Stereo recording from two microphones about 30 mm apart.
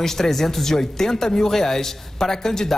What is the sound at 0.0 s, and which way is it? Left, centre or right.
Speech, centre.